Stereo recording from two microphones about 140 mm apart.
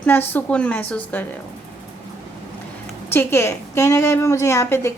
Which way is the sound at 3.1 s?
15° left (ahead or behind).